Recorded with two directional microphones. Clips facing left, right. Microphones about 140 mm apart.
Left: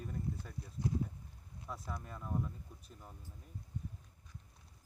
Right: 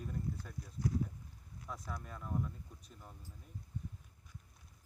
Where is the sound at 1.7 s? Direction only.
5° left (ahead or behind).